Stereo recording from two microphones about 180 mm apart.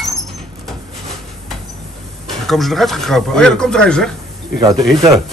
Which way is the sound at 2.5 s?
Centre (ahead or behind).